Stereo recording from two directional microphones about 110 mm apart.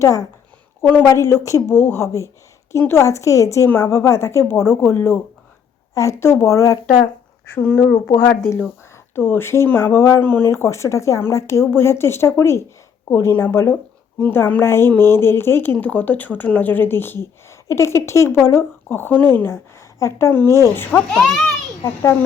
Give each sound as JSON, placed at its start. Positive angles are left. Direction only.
{"t": 0.0, "sound": "a woman's voice", "side_deg": 30}
{"t": 0.8, "sound": "a woman's voice", "side_deg": 15}
{"t": 1.0, "sound": "a woman's voice", "side_deg": 25}
{"t": 7.5, "sound": "speech", "side_deg": 10}
{"t": 8.1, "sound": "a woman's voice", "side_deg": 25}
{"t": 21.1, "sound": "a child's voice", "side_deg": 0}
{"t": 21.8, "sound": "a child's voice", "side_deg": 25}